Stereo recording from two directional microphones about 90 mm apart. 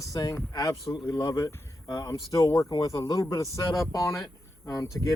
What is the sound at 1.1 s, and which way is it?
Speech, 50° left (ahead or behind).